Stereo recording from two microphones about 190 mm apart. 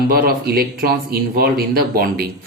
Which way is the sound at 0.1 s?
55° right (ahead or behind).